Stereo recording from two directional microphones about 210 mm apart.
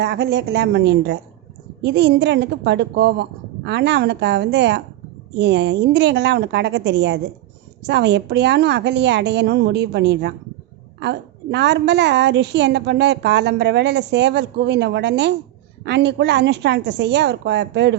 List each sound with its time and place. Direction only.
0.0 s a woman's voice: 55° right (ahead or behind)